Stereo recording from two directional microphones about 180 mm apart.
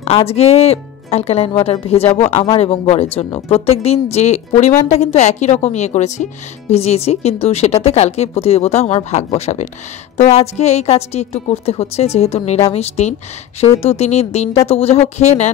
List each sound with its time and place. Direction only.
0.3 s speech: 35° left (ahead or behind)